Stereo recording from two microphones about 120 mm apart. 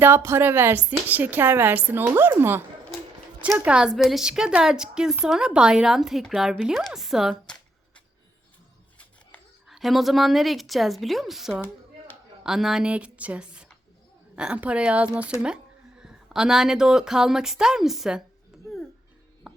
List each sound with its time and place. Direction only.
0.0 s speech: 20° right (ahead or behind)
3.6 s a woman's voice: 10° right (ahead or behind)
9.6 s a woman's voice: centre (ahead or behind)
18.5 s babbling: 5° right (ahead or behind)
19.4 s chopping: 5° right (ahead or behind)